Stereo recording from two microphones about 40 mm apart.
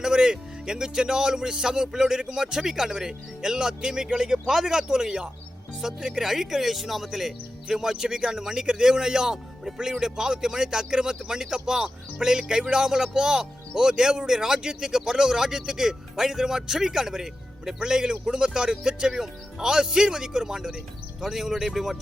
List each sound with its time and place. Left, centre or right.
0.0 s speech: centre